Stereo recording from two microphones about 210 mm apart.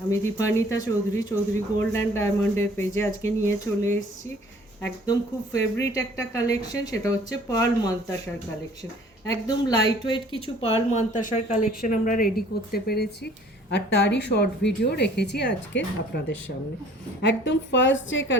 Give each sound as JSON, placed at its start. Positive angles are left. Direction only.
{"t": 0.1, "sound": "speech", "side_deg": 15}
{"t": 5.5, "sound": "a woman's voice", "side_deg": 55}
{"t": 5.9, "sound": "speech", "side_deg": 15}
{"t": 9.2, "sound": "a woman's voice", "side_deg": 20}
{"t": 17.2, "sound": "a woman's voice", "side_deg": 55}